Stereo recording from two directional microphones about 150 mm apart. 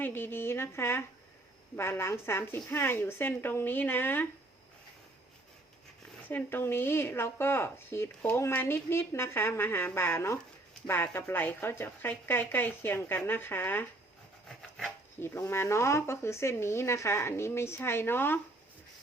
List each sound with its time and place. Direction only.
0.0 s speech: 15° left (ahead or behind)
6.2 s speech: 15° left (ahead or behind)
14.4 s rub: 5° left (ahead or behind)
15.2 s speech: 15° left (ahead or behind)